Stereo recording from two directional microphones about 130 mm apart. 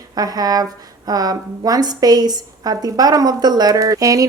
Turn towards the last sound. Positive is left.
turn(degrees=-25)  # may be behind; listen again after turning